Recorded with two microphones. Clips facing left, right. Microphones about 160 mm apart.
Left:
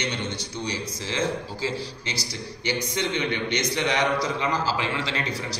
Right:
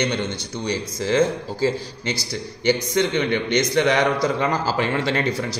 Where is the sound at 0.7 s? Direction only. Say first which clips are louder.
Right 11 dB; 50° right (ahead or behind).